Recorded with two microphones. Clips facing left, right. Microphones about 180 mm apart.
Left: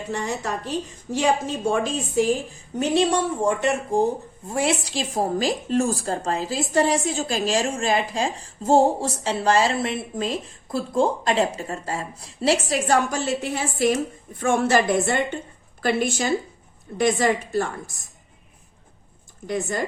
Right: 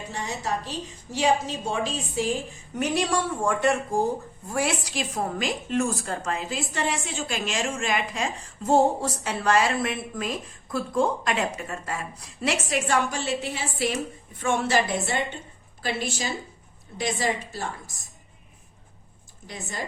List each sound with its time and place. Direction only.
1.1 s a woman's voice: 50° left (ahead or behind)
2.7 s a woman's voice: 25° left (ahead or behind); by 17.7 s 50° left (ahead or behind)
19.5 s a woman's voice: 50° left (ahead or behind)